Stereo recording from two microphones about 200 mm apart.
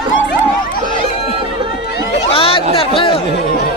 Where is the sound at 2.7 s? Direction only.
25° left (ahead or behind).